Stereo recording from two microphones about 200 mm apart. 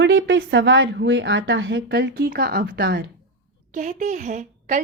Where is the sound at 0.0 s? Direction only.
65° right (ahead or behind).